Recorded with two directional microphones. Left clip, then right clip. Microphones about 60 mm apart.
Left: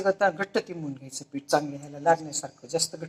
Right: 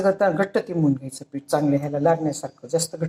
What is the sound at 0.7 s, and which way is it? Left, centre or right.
Speech, right.